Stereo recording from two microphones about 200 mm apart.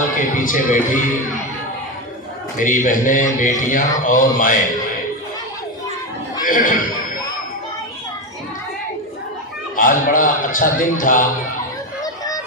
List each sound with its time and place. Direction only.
0.2 s speech: 40° left (ahead or behind)
2.6 s speech: 40° left (ahead or behind)
6.4 s speech: 45° left (ahead or behind)
9.7 s a man's voice: 40° left (ahead or behind)
12.0 s a sound: 20° left (ahead or behind)